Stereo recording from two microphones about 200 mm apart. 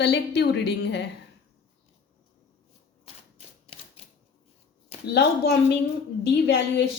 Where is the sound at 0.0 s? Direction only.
55° left (ahead or behind).